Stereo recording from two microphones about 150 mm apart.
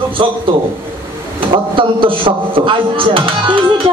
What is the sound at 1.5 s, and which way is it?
A man's voice, 35° right (ahead or behind).